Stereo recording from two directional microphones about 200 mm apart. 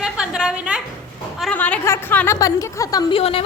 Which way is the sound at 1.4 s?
5° left (ahead or behind).